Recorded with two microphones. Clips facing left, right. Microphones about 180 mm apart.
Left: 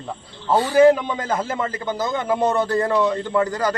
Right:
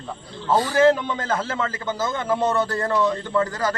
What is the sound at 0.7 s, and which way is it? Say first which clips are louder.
A man's voice: left 5 dB; 15° left (ahead or behind).